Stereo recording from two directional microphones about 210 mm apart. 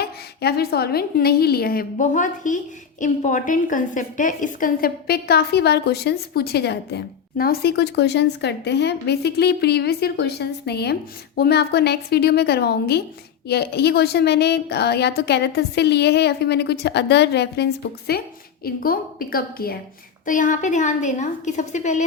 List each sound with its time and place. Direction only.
0.0 s a woman's voice: 50° left (ahead or behind)